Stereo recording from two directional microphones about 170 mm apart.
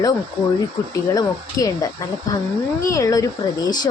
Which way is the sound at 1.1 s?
20° left (ahead or behind).